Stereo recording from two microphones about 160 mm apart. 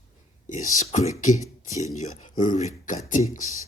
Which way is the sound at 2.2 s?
50° left (ahead or behind).